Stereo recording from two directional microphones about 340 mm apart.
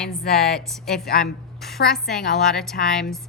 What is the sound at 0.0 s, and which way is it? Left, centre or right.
A woman's voice, centre.